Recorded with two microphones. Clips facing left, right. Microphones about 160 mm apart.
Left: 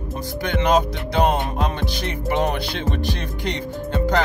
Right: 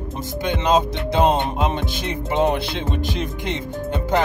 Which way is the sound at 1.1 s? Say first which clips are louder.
Right 1 dB; 20° right (ahead or behind).